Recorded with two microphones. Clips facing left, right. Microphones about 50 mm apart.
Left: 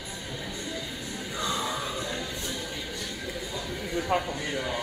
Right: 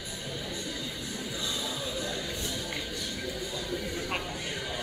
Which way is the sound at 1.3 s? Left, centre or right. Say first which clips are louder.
Left 7 dB; left.